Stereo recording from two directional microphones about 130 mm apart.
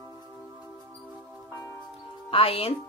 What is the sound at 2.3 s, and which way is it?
Speech, 45° left (ahead or behind).